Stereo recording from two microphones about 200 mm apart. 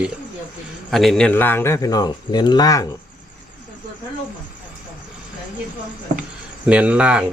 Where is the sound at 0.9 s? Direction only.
Centre (ahead or behind); by 2.9 s 20° left (ahead or behind).